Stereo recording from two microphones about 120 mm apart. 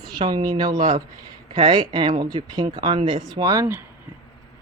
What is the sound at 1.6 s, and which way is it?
Speech, 45° right (ahead or behind).